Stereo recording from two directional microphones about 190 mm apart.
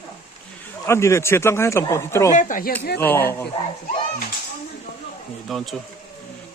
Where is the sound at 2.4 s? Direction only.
45° left (ahead or behind).